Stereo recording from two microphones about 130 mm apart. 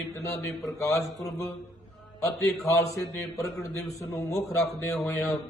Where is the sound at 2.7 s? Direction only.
25° left (ahead or behind).